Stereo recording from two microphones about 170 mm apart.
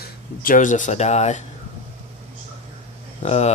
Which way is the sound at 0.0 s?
55° left (ahead or behind).